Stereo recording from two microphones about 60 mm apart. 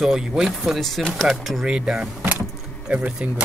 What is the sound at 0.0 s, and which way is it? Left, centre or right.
Speech, centre.